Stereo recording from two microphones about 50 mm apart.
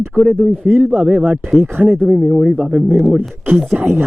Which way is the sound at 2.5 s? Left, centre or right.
Centre.